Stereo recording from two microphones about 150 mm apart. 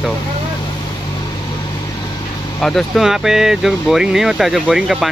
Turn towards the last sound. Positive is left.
turn(degrees=-5)  # may be behind; listen again after turning